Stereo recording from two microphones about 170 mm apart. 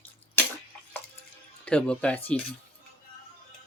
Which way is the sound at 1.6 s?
5° left (ahead or behind).